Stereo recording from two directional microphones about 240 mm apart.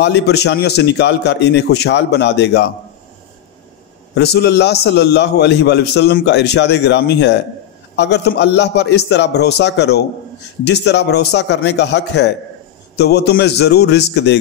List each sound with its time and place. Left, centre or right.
0.0 s a man's voice: left
4.1 s a man's voice: left